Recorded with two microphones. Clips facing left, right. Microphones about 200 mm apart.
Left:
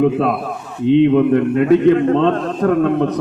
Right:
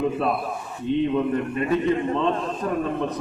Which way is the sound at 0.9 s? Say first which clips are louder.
Left 10 dB; 75° left (ahead or behind).